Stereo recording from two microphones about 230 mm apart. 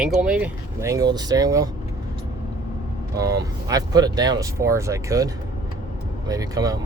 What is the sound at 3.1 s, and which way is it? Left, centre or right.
Speech, centre.